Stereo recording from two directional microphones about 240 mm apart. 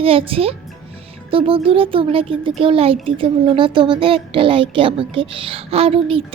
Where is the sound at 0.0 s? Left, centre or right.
Right.